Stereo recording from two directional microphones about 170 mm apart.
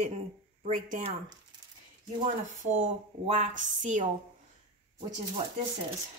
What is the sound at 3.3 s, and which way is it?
Speech, 45° right (ahead or behind).